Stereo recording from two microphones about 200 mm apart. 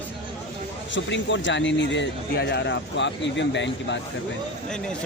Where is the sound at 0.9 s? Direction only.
65° left (ahead or behind).